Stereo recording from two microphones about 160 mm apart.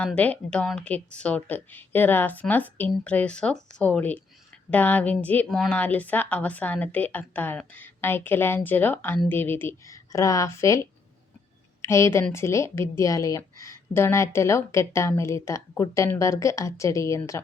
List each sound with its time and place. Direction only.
0.0 s a woman's voice: 10° left (ahead or behind)